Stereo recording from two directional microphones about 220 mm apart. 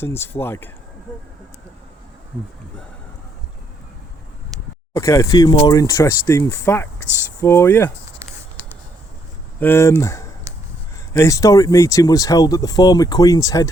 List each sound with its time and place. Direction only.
0.0 s speech: 10° left (ahead or behind)
4.9 s speech: 15° left (ahead or behind)
9.6 s speech: 10° left (ahead or behind)
10.5 s a sound: 15° right (ahead or behind)
11.1 s speech: 15° left (ahead or behind)